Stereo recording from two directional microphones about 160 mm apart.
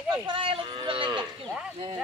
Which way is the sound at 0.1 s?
30° right (ahead or behind).